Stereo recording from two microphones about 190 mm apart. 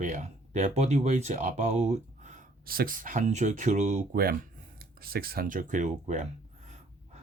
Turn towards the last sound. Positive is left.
turn(degrees=-40)  # may be behind; listen again after turning